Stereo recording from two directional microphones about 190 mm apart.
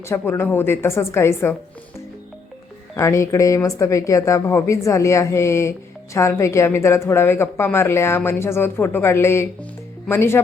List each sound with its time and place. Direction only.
0.1 s speech: 10° left (ahead or behind)
2.9 s speech: 15° left (ahead or behind)